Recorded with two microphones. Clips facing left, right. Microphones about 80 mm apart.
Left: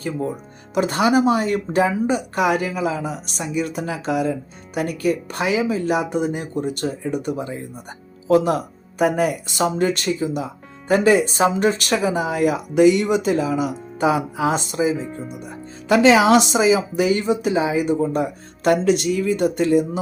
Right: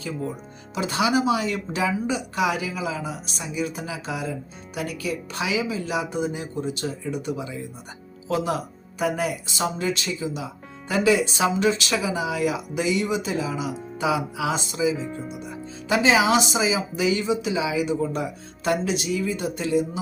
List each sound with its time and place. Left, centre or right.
0.7 s speech: left
14.5 s speech: left
18.6 s speech: left